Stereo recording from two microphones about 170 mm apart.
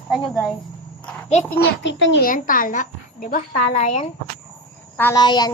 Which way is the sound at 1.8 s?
90° left.